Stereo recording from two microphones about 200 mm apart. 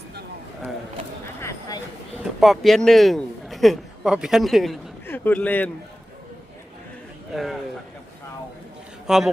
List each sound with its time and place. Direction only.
1.4 s a sound: 15° left (ahead or behind)
2.4 s a man's voice: centre (ahead or behind)
7.3 s speech: centre (ahead or behind)
9.0 s a man's voice: centre (ahead or behind)